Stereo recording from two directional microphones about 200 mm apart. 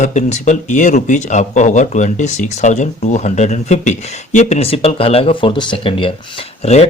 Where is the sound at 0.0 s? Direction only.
35° left (ahead or behind).